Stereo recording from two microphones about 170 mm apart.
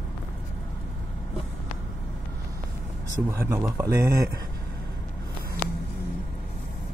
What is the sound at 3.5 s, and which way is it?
Speech, 15° right (ahead or behind).